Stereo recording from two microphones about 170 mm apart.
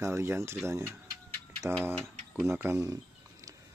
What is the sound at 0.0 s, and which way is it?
Speech, 15° right (ahead or behind).